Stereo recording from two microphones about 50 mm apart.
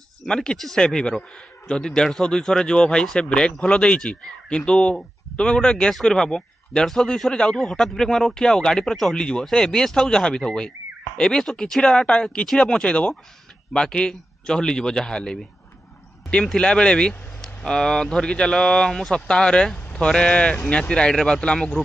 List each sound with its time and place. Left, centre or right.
0.2 s speech: centre
9.1 s speech: centre
16.5 s speech: centre